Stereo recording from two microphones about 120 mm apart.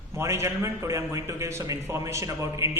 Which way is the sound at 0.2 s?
25° right (ahead or behind).